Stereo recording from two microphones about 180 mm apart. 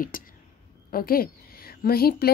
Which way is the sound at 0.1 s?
50° left (ahead or behind).